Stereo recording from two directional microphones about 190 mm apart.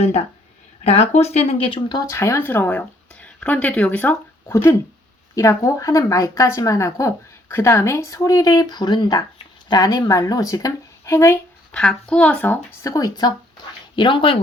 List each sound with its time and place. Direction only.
0.9 s a woman's voice: 35° left (ahead or behind); by 11.3 s 15° left (ahead or behind)
11.7 s speech: 5° left (ahead or behind); by 14.3 s 25° left (ahead or behind)